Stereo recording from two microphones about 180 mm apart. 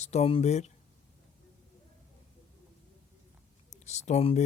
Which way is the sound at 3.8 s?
40° left (ahead or behind).